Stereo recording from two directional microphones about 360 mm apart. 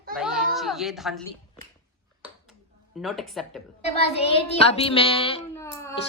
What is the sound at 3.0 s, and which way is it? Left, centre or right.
Speech, centre.